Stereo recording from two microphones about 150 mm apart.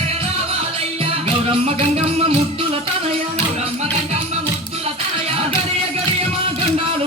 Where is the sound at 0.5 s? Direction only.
40° right (ahead or behind).